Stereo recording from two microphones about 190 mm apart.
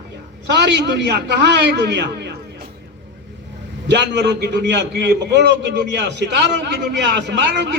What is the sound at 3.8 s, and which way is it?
A man's voice, 65° right (ahead or behind).